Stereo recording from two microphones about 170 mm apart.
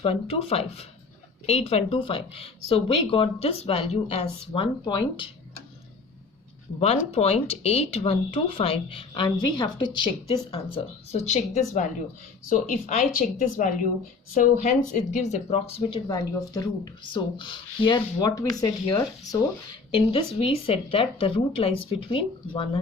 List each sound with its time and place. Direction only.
0.0 s speech: 35° left (ahead or behind)
6.7 s speech: 35° left (ahead or behind); by 14.7 s 50° left (ahead or behind)
15.1 s speech: 40° left (ahead or behind)
16.0 s speech: 20° left (ahead or behind)
19.9 s speech: 30° left (ahead or behind)